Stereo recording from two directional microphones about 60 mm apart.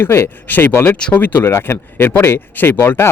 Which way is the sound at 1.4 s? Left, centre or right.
Left.